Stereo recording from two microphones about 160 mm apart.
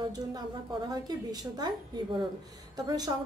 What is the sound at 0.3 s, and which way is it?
A woman's voice, 25° right (ahead or behind).